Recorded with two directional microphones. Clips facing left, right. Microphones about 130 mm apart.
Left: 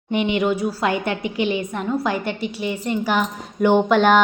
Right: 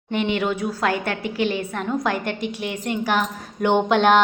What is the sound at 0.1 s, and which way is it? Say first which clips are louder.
A woman's voice: left 3 dB; 10° left (ahead or behind).